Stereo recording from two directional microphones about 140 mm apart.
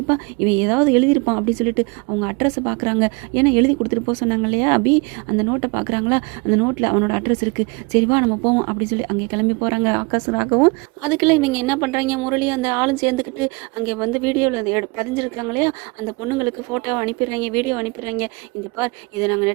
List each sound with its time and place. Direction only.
0.1 s speech: 15° right (ahead or behind)